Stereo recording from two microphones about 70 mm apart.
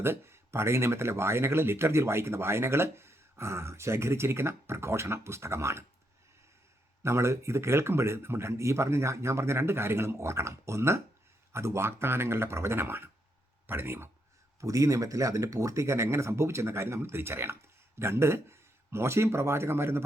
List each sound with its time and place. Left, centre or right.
0.0 s speech: right
7.0 s speech: right
14.6 s speech: right